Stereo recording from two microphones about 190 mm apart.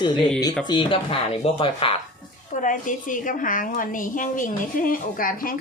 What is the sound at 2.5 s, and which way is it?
A woman's voice, 40° left (ahead or behind).